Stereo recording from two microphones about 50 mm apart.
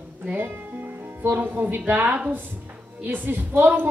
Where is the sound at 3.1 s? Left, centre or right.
Right.